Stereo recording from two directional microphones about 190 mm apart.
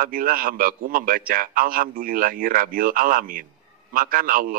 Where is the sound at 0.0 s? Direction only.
50° right (ahead or behind).